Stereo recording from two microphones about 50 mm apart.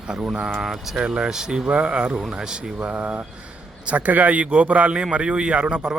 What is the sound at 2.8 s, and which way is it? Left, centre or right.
A man's voice, right.